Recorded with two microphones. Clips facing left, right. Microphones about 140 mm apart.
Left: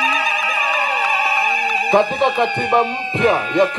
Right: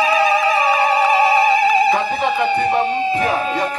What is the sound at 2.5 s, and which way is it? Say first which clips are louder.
Music: right 1 dB; 30° right (ahead or behind).